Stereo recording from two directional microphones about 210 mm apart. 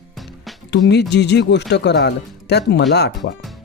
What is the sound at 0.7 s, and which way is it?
Speech, 55° left (ahead or behind).